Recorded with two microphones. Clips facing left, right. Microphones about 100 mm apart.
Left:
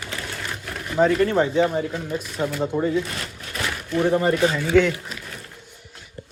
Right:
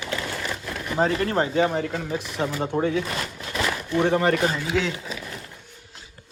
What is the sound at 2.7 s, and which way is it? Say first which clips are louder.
Speech: left 1 dB; 70° right (ahead or behind).